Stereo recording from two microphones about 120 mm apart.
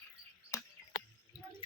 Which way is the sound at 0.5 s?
25° left (ahead or behind).